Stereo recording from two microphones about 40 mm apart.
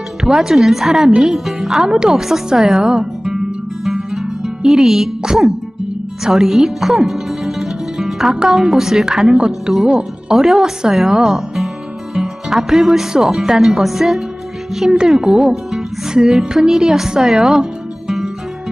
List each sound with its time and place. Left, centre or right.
0.2 s a woman's voice: centre
3.8 s music: centre
6.2 s speech: centre
10.3 s a woman's voice: centre
16.0 s a woman's voice: centre